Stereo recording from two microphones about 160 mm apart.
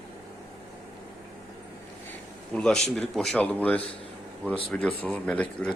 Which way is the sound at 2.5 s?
5° left (ahead or behind).